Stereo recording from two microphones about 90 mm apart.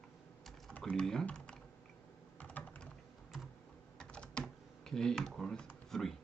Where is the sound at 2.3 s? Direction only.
20° left (ahead or behind).